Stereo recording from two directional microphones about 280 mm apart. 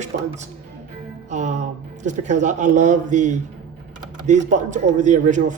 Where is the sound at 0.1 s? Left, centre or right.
Right.